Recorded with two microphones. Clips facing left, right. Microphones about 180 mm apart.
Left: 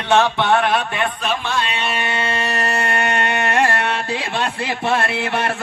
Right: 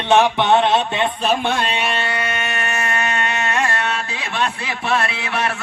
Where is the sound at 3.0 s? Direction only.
60° left (ahead or behind).